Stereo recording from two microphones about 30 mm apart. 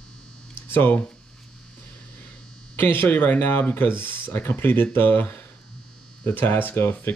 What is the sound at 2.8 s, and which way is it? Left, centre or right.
Speech, left.